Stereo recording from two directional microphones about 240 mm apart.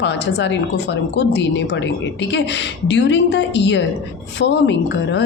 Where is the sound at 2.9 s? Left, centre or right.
Left.